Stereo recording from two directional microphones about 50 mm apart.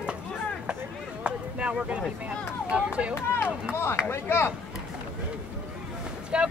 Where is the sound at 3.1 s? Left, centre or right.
Left.